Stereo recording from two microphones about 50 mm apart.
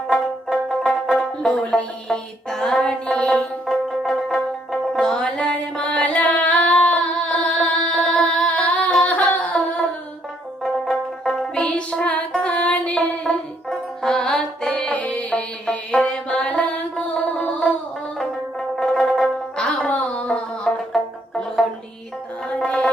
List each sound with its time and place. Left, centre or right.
0.1 s music: centre
0.9 s music: centre
2.8 s music: centre
3.7 s music: centre; by 6.1 s left
6.3 s singing: left
10.6 s music: centre
12.0 s music: left
13.0 s music: centre
14.9 s music: left
18.8 s music: centre
19.5 s music: centre